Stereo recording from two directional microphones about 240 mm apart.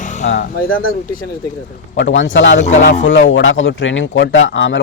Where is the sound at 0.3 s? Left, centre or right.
Left.